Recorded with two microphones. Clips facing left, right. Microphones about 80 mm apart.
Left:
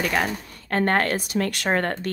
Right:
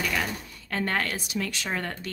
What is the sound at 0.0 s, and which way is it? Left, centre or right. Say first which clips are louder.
Speech: left 5 dB; left.